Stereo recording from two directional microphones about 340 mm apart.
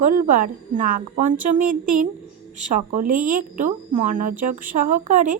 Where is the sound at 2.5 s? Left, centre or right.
Right.